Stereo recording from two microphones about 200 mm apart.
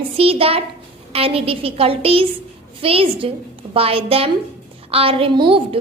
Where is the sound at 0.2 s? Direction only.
30° right (ahead or behind).